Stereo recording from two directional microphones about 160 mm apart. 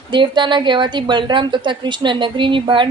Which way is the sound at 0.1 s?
30° right (ahead or behind).